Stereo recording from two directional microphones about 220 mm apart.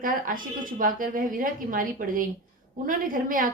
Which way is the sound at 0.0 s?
40° right (ahead or behind).